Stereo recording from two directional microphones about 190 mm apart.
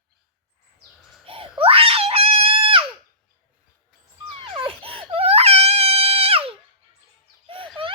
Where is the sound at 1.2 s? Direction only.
30° right (ahead or behind).